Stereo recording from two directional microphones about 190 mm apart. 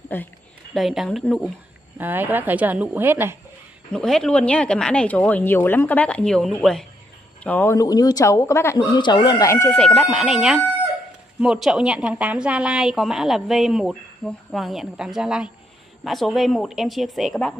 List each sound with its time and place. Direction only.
0.1 s speech: 10° left (ahead or behind)
0.7 s a woman's voice: centre (ahead or behind)
2.0 s a woman's voice: 10° right (ahead or behind)
3.9 s a woman's voice: 5° left (ahead or behind)